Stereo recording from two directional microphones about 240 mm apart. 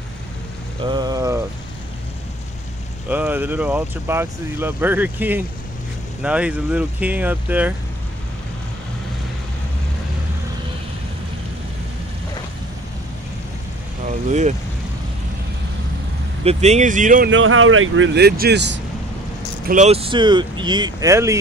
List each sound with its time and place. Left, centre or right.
0.8 s rain on surface: centre
3.1 s speech: centre
14.0 s speech: right
16.4 s speech: right
17.3 s speech: right
19.7 s speech: right